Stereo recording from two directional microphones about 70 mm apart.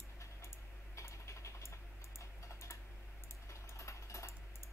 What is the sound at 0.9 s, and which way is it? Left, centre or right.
Typing, left.